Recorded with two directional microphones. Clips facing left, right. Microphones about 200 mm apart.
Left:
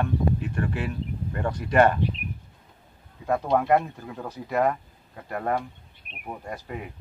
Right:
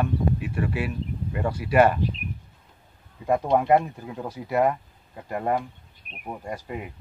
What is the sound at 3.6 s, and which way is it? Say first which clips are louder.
Speech: right 2 dB; 15° right (ahead or behind).